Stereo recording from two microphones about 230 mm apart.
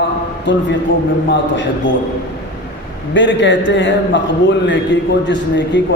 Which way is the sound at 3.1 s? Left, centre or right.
Left.